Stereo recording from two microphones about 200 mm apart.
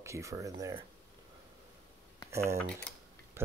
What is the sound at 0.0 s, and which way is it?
Speech, 15° right (ahead or behind).